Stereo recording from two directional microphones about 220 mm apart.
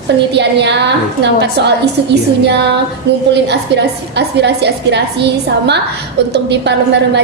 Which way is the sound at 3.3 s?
50° right (ahead or behind).